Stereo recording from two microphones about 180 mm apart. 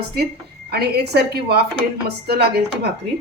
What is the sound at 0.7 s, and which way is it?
A woman's voice, 65° right (ahead or behind).